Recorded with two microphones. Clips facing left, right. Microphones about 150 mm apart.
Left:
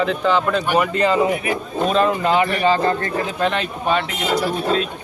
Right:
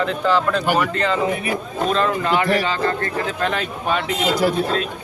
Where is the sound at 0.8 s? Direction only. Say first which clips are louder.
Left 3 dB; 15° left (ahead or behind).